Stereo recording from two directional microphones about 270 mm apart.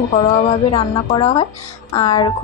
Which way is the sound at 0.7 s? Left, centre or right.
Centre.